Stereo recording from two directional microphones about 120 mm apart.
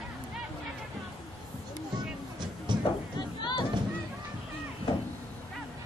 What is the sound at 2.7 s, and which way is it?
Music, 40° right (ahead or behind).